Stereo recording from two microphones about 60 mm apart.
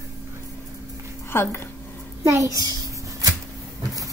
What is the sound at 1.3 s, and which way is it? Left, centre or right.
Speech, left.